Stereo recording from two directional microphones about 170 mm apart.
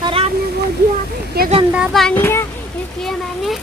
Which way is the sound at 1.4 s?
65° right (ahead or behind).